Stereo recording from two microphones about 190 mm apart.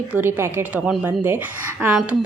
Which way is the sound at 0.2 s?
10° right (ahead or behind).